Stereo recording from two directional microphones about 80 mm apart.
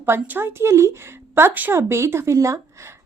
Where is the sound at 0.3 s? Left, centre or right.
Right.